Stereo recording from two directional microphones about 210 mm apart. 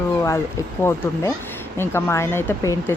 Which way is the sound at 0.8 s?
10° left (ahead or behind).